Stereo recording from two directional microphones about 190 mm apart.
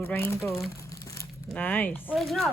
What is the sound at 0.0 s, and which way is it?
Speech, 10° left (ahead or behind).